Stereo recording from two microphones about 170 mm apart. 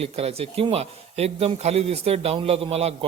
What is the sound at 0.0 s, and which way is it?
A man's voice, 35° right (ahead or behind).